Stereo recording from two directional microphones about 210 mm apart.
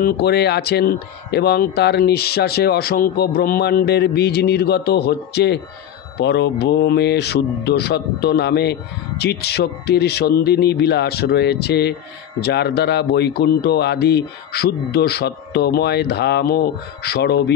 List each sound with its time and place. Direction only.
0.0 s speech: 50° left (ahead or behind)